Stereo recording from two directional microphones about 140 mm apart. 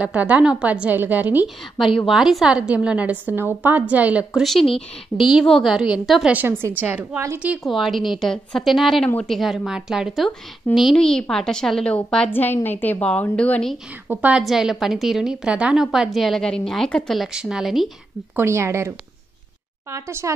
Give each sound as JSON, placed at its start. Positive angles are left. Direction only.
{"t": 0.0, "sound": "a woman's voice", "side_deg": -10}
{"t": 2.0, "sound": "a woman's voice", "side_deg": 0}
{"t": 6.3, "sound": "a woman's voice", "side_deg": -15}
{"t": 7.5, "sound": "a woman's voice", "side_deg": 0}
{"t": 14.0, "sound": "a woman's voice", "side_deg": -10}
{"t": 18.3, "sound": "speech", "side_deg": -20}